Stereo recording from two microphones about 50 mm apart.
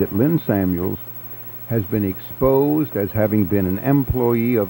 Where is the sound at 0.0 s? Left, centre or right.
Right.